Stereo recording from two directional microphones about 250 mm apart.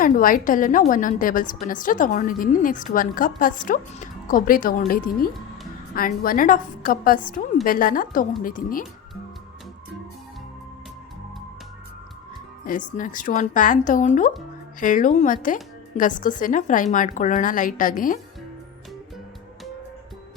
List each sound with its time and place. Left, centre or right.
0.0 s a woman's voice: left
12.6 s a woman's voice: left